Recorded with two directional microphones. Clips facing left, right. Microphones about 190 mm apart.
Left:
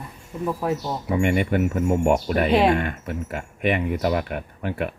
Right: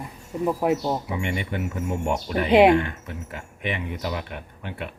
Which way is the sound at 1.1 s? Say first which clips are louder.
Left 7 dB; 50° left (ahead or behind).